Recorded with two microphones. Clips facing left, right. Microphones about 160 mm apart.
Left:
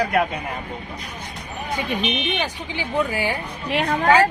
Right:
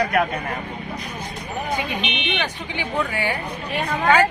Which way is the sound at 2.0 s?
40° left (ahead or behind).